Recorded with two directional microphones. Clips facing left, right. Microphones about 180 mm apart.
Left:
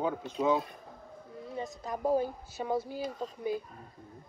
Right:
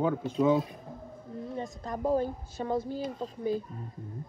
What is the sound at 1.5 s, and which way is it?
Speech, 5° left (ahead or behind).